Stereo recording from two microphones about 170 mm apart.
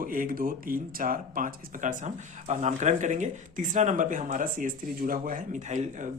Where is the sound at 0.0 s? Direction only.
55° right (ahead or behind).